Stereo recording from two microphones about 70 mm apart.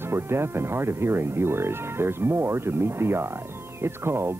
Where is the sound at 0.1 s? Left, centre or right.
Right.